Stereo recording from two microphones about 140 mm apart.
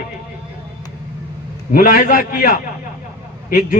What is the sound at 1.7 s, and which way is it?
A man's voice, 80° left.